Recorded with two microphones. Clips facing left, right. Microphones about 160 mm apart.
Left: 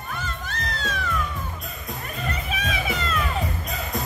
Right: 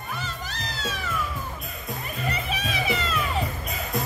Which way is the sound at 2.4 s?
Centre (ahead or behind).